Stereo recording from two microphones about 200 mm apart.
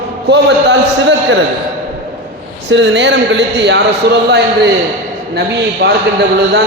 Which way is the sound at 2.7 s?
60° right (ahead or behind).